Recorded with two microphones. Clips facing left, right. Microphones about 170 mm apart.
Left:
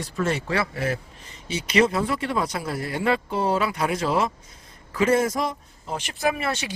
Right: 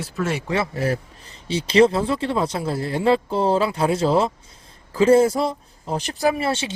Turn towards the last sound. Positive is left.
turn(degrees=-30)  # may be behind; listen again after turning